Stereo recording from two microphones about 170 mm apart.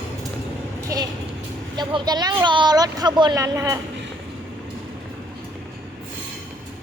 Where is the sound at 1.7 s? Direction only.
25° right (ahead or behind).